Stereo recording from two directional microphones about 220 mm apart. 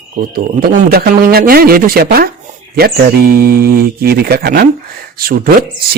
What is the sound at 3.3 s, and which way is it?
Speech, 45° right (ahead or behind).